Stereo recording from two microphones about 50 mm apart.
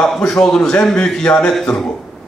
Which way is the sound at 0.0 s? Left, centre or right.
Centre.